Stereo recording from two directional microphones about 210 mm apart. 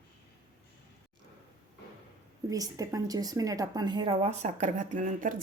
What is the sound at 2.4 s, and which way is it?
Speech, 15° right (ahead or behind).